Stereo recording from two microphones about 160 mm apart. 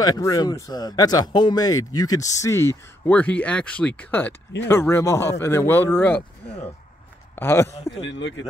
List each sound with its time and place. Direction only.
0.0 s speech: 20° left (ahead or behind)
7.3 s speech: 15° left (ahead or behind)